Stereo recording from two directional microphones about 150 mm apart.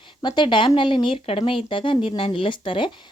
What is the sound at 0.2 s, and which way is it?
A woman's voice, 30° left (ahead or behind).